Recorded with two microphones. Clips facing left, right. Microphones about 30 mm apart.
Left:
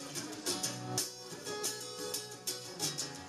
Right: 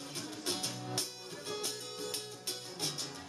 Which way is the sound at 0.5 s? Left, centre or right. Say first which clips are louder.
Right 1 dB; right.